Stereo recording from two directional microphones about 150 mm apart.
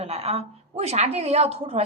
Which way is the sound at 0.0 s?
45° right (ahead or behind).